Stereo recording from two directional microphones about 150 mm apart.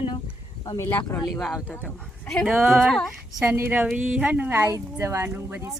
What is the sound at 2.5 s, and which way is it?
Speech, 15° right (ahead or behind).